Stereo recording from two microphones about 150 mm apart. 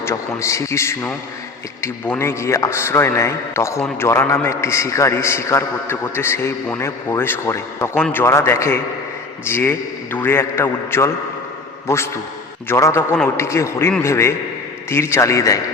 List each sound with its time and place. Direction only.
0.0 s a man's voice: 20° left (ahead or behind)